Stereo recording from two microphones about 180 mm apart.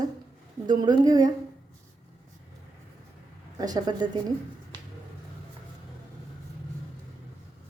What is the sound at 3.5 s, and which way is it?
Speech, 20° right (ahead or behind).